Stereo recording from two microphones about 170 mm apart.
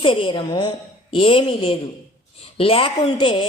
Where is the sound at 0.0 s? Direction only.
30° left (ahead or behind).